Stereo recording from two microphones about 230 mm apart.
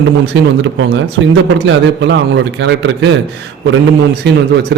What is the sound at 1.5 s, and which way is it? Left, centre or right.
A man's voice, right.